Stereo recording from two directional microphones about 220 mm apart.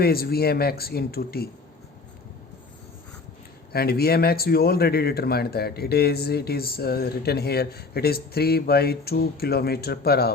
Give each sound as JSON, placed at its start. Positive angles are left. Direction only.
{"t": 0.0, "sound": "speech", "side_deg": 45}
{"t": 3.7, "sound": "speech", "side_deg": 45}